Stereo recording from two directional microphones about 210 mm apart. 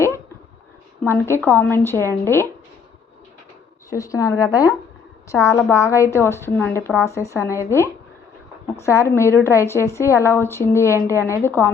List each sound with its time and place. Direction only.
1.0 s a woman's voice: 10° left (ahead or behind)
3.8 s a woman's voice: 15° left (ahead or behind)